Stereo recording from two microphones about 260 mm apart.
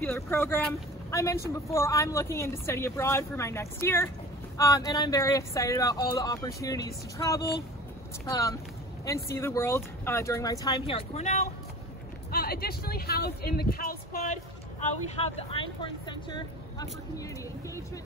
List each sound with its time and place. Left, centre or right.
0.0 s speech: centre
9.0 s speech: centre
12.3 s speech: left
14.8 s speech: left